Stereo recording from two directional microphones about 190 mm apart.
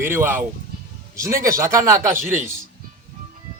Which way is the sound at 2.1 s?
45° right (ahead or behind).